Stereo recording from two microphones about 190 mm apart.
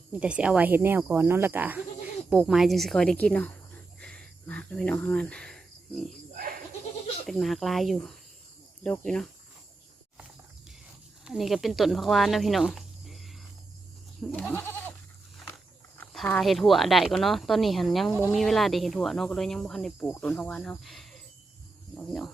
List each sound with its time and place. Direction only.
0.1 s speech: 5° right (ahead or behind)
7.3 s speech: centre (ahead or behind)
11.3 s speech: centre (ahead or behind)
16.0 s speech: 10° left (ahead or behind)